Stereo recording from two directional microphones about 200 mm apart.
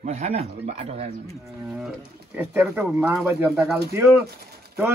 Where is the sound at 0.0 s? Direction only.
30° right (ahead or behind).